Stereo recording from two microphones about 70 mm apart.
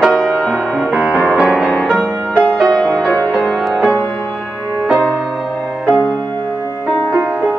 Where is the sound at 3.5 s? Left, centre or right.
Centre.